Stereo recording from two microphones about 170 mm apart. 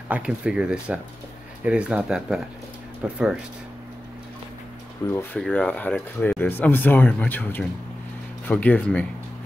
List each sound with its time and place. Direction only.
0.1 s speech: 5° right (ahead or behind)
5.0 s speech: 15° left (ahead or behind)